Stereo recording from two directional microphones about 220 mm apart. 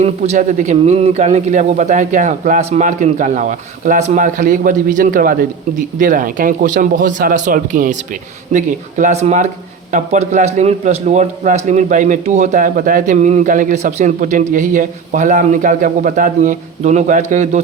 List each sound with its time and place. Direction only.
0.0 s a man's voice: 30° right (ahead or behind)